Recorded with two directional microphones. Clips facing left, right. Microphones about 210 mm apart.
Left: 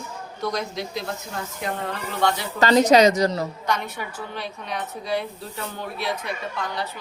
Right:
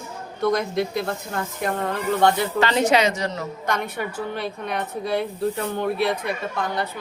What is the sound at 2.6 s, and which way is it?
Speech, 40° left (ahead or behind).